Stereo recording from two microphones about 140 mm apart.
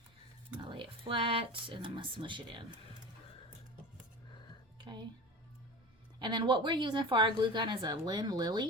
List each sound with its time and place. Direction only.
0.7 s speech: 35° right (ahead or behind)
6.1 s a woman's voice: 35° right (ahead or behind)